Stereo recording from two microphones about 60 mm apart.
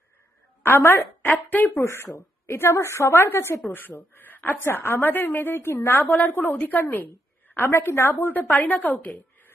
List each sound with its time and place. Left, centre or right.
0.8 s a woman's voice: left
1.3 s a woman's voice: left
1.8 s a woman's voice: left
7.6 s a woman's voice: left